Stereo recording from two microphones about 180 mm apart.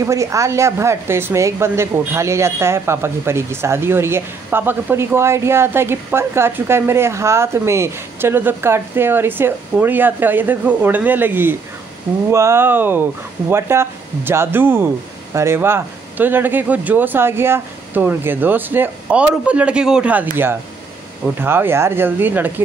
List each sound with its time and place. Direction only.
0.0 s a woman's voice: 15° right (ahead or behind)